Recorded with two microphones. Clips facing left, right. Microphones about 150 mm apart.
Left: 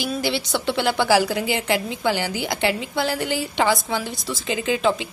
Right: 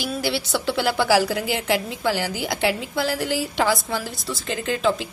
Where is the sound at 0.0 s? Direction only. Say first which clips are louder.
Left 1 dB; 5° right (ahead or behind).